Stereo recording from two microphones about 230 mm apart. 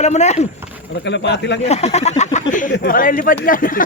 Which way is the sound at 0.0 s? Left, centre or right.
Left.